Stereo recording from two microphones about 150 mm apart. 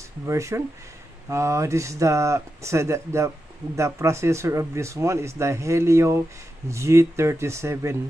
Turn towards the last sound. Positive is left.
turn(degrees=-15)  # may be behind; listen again after turning